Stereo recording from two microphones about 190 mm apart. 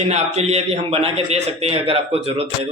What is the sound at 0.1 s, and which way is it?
A man's voice, 35° right (ahead or behind).